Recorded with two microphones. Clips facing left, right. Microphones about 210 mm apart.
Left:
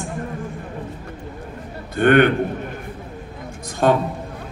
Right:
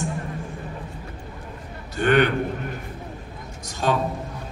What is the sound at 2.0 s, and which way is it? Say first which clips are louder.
Speech: left 5 dB; 55° left (ahead or behind).